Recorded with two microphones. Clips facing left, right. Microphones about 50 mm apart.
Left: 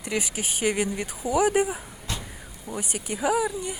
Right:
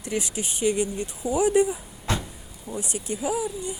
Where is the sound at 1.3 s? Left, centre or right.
Left.